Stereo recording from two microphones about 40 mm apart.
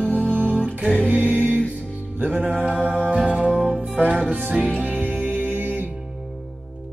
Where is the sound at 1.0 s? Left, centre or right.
Right.